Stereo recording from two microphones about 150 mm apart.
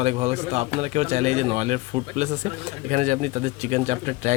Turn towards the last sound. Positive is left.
turn(degrees=-50)  # may be behind; listen again after turning